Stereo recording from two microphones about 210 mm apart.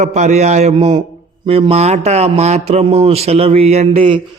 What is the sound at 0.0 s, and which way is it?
A man's voice, 35° right (ahead or behind).